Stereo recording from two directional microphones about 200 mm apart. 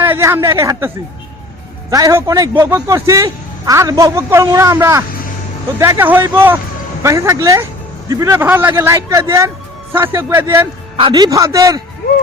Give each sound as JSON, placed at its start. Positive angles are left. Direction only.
{"t": 0.0, "sound": "speech", "side_deg": -10}
{"t": 1.9, "sound": "speech", "side_deg": -15}
{"t": 10.9, "sound": "speech", "side_deg": -25}